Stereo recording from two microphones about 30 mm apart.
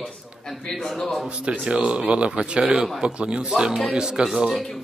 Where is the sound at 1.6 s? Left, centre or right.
Right.